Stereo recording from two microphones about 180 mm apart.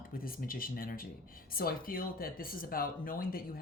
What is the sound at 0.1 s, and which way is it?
Speech, 50° left (ahead or behind).